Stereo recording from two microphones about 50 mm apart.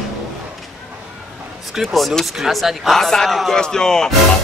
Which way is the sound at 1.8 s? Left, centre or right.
Centre.